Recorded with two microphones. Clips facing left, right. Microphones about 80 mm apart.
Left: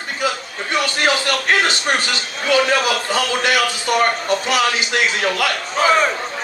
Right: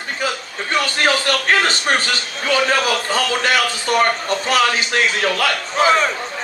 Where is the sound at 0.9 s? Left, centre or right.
Right.